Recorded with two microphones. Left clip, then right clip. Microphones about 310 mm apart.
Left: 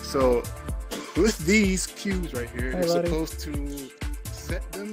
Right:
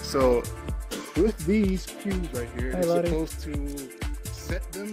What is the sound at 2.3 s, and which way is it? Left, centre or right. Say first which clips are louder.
Speech: left 1 dB; centre.